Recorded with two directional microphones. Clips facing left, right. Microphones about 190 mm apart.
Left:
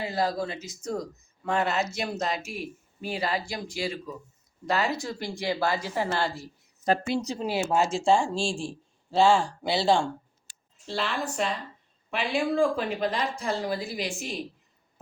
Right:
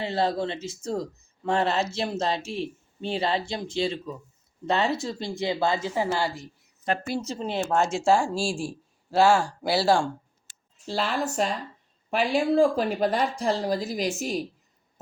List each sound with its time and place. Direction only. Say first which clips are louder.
0.0 s speech: right 2 dB; 25° right (ahead or behind)
7.1 s speech: left 1 dB; 15° left (ahead or behind); by 10.1 s 5° right (ahead or behind)
10.8 s speech: right 3 dB; 40° right (ahead or behind)
13.4 s a woman's voice: right 4 dB; 35° right (ahead or behind)